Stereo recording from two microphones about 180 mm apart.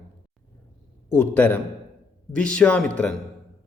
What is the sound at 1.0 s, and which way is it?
A man's voice, 10° left (ahead or behind).